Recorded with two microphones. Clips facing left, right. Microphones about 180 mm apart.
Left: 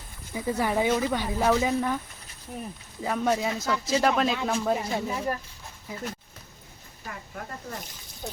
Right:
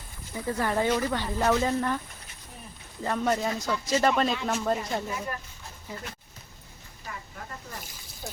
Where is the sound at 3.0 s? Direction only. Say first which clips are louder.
Left 1 dB; 5° left (ahead or behind).